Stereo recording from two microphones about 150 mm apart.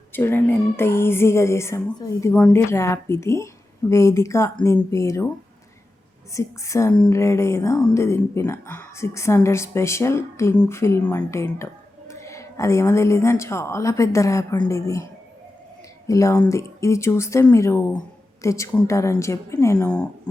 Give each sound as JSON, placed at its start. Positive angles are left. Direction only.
{"t": 0.1, "sound": "a woman's voice", "side_deg": 15}
{"t": 6.3, "sound": "a woman's voice", "side_deg": 20}
{"t": 16.0, "sound": "a woman's voice", "side_deg": 20}
{"t": 19.8, "sound": "a woman's voice", "side_deg": 5}